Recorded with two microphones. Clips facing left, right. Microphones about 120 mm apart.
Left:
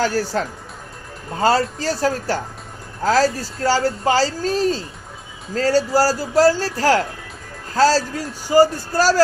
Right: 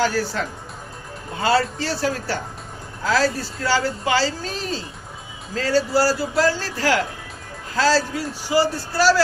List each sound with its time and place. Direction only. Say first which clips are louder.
0.0 s a man's voice: left 2 dB; 40° left (ahead or behind)